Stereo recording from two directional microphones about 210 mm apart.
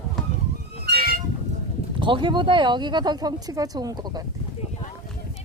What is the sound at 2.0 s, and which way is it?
Speech, 25° right (ahead or behind).